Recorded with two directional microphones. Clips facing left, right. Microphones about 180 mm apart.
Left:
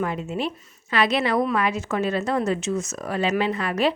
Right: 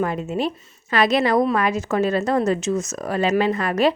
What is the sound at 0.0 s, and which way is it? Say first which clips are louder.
A woman's voice: right 3 dB; 40° right (ahead or behind).